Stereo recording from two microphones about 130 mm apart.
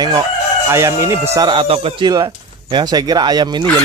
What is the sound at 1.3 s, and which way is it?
Speech, 35° right (ahead or behind).